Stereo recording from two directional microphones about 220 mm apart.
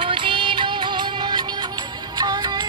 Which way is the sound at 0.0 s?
25° right (ahead or behind).